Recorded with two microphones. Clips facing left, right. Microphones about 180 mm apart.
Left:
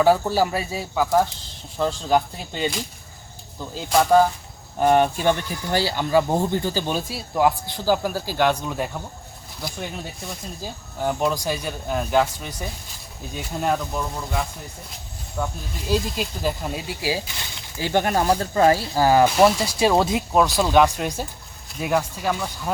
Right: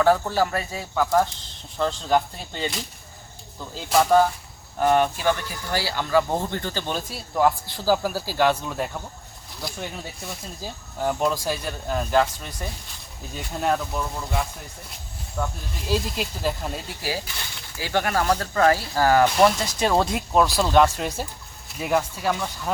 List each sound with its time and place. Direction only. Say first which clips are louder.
0.0 s speech: left 2 dB; 10° left (ahead or behind)
3.8 s speech: left 1 dB; centre (ahead or behind)
4.8 s speech: left 2 dB; 20° left (ahead or behind); by 17.1 s 5° left (ahead or behind)
17.7 s speech: left 3 dB; 20° left (ahead or behind); by 22.7 s 5° left (ahead or behind)